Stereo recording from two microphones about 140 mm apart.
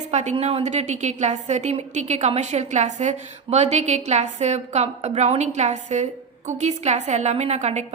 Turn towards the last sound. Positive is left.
turn(degrees=-55)  # may be behind; listen again after turning